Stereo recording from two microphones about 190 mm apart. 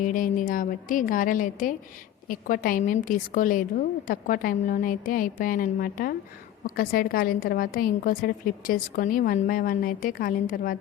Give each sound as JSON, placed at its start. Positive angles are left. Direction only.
{"t": 0.0, "sound": "a woman's voice", "side_deg": 45}